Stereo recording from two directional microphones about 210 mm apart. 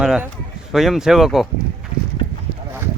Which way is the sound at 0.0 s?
5° right (ahead or behind).